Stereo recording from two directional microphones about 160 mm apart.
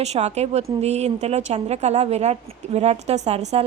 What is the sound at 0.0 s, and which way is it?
Speech, 40° right (ahead or behind).